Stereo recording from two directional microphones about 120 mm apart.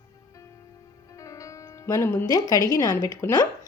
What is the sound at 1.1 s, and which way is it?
Speech, 25° left (ahead or behind).